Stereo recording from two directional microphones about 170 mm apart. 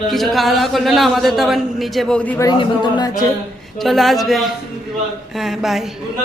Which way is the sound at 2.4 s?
25° left (ahead or behind).